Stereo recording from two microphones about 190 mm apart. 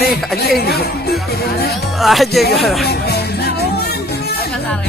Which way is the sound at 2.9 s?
60° left (ahead or behind).